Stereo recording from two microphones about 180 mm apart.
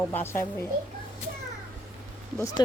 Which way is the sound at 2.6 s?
25° left (ahead or behind).